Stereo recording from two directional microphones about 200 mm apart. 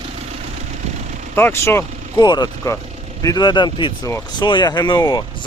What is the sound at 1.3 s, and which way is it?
Speech, 10° left (ahead or behind).